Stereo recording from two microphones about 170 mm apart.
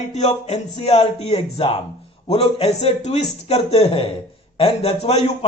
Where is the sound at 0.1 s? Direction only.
40° left (ahead or behind).